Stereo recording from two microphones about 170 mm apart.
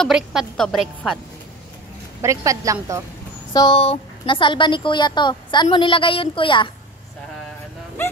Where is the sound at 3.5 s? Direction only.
30° left (ahead or behind).